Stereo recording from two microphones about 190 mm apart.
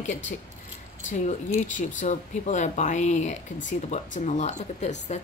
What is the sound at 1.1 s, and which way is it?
Speech, 40° left (ahead or behind).